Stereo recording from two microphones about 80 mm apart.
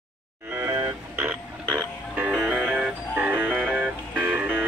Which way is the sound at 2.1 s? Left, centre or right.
Centre.